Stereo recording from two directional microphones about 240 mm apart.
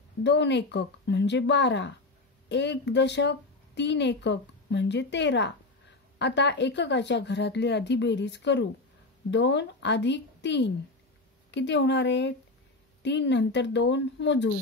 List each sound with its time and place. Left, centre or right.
0.2 s a woman's voice: left